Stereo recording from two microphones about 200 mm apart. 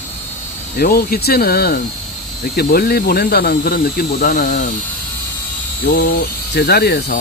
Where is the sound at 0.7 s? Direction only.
45° left (ahead or behind).